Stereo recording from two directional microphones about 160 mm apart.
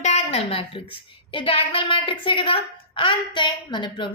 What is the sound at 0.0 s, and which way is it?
A woman's voice, 40° left (ahead or behind).